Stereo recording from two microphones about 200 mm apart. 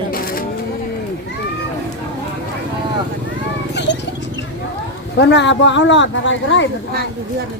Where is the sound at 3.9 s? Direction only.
65° left (ahead or behind).